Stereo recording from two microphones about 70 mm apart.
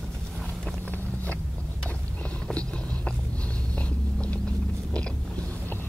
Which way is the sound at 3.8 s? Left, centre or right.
Centre.